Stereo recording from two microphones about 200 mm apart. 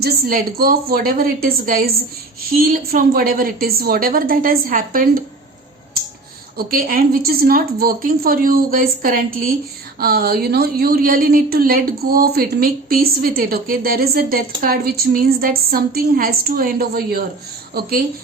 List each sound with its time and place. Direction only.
0.0 s a woman's voice: 45° right (ahead or behind)
6.6 s a woman's voice: 45° right (ahead or behind)